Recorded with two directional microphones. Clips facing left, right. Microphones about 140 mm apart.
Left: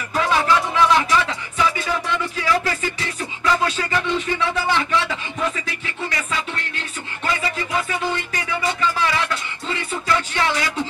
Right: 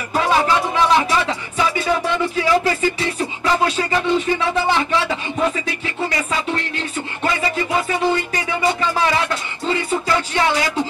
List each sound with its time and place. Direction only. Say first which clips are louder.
0.1 s music: right 2 dB; 30° right (ahead or behind)